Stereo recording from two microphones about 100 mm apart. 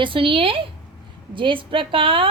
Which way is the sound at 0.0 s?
60° right (ahead or behind).